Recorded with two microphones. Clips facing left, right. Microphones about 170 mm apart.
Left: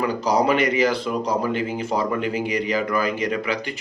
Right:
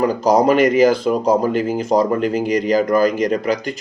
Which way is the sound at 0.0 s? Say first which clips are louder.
Right 6 dB; 45° right (ahead or behind).